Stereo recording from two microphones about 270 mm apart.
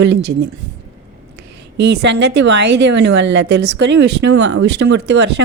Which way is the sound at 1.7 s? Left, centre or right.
Right.